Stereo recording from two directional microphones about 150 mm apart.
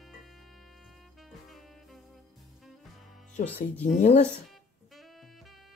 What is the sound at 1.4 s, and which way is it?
Music, centre (ahead or behind).